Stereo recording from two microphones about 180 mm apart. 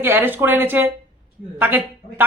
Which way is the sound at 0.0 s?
10° right (ahead or behind).